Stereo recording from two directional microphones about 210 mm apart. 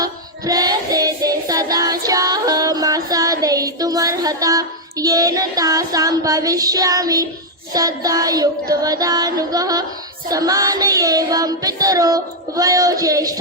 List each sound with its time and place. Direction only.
0.0 s music: 15° right (ahead or behind)
7.7 s child singing: 15° right (ahead or behind)